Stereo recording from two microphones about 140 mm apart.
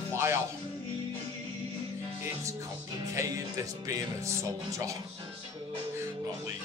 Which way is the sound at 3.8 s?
20° right (ahead or behind).